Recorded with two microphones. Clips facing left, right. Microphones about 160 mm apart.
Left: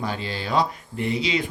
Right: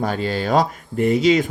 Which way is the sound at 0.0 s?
45° right (ahead or behind).